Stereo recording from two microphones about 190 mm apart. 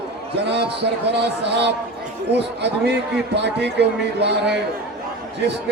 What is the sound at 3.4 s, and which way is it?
A man's voice, 65° right (ahead or behind).